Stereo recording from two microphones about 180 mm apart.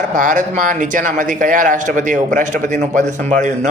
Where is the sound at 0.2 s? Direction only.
45° right (ahead or behind).